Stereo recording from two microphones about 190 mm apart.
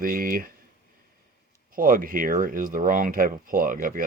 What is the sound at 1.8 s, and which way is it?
Speech, 45° right (ahead or behind).